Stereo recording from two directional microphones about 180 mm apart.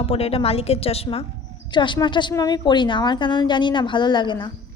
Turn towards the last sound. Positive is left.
turn(degrees=25)  # may be behind; listen again after turning